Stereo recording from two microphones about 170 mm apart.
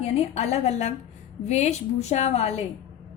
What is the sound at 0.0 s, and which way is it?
A woman's voice, 40° left (ahead or behind).